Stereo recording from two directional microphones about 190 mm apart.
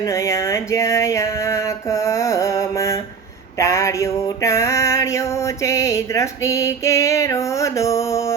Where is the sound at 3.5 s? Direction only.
15° left (ahead or behind).